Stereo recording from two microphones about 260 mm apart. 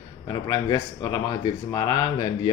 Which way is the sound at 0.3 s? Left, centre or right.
Centre.